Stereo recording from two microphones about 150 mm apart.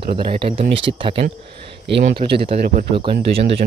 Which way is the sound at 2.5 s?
75° right (ahead or behind).